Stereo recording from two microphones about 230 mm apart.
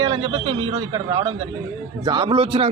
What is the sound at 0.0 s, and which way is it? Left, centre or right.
Speech, centre.